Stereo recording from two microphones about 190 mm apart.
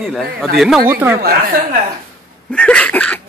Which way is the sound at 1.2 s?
50° right (ahead or behind).